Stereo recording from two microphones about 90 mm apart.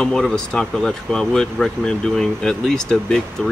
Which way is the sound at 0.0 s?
5° left (ahead or behind).